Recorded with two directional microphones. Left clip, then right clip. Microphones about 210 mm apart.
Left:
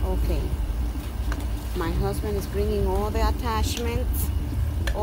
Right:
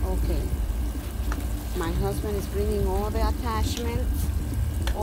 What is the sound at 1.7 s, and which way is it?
Speech, 10° left (ahead or behind).